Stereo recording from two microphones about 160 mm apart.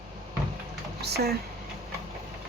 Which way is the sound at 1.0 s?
90° right.